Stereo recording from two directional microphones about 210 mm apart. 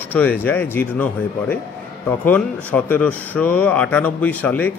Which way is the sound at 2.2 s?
5° left (ahead or behind).